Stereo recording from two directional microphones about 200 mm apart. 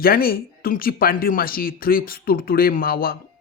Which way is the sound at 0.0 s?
45° left (ahead or behind).